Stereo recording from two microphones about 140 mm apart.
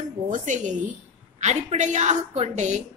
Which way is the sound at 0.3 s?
65° right (ahead or behind).